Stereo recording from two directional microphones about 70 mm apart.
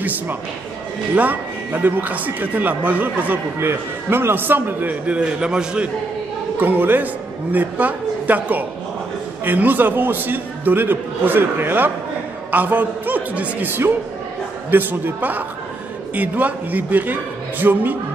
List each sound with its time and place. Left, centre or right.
1.1 s a man's voice: right
3.5 s a man's voice: right
5.0 s a man's voice: centre
6.6 s a man's voice: right
14.7 s a man's voice: right